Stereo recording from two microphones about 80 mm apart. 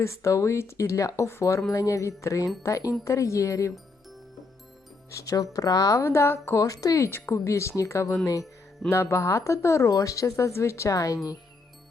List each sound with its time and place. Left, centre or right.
0.0 s speech: left
5.1 s speech: left
6.6 s speech: left